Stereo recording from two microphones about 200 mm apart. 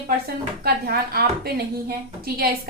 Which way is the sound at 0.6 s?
50° right (ahead or behind).